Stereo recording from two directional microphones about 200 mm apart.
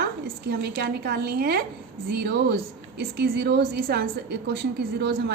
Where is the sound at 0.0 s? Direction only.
55° right (ahead or behind).